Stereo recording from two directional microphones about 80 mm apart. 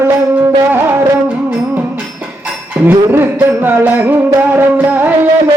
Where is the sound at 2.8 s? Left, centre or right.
Right.